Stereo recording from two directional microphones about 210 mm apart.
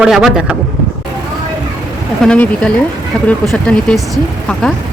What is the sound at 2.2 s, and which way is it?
Speech, 5° left (ahead or behind).